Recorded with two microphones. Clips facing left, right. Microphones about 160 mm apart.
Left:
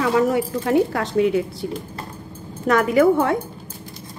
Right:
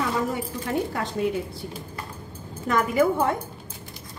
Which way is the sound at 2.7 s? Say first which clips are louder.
Left 6 dB; 75° left (ahead or behind).